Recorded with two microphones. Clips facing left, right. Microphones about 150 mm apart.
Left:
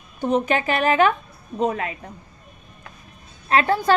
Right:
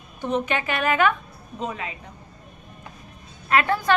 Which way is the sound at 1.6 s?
50° left (ahead or behind).